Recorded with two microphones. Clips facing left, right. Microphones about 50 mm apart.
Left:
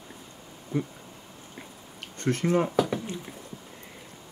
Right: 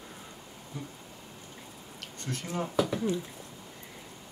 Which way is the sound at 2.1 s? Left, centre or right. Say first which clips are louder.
Left 10 dB; left.